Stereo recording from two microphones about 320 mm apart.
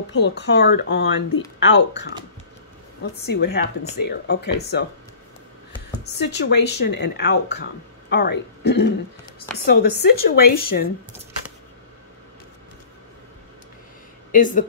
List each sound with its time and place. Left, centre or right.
0.1 s speech: left
5.9 s speech: left
14.3 s speech: left